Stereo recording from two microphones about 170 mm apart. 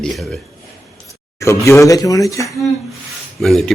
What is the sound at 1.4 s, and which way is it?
Speech, 15° left (ahead or behind).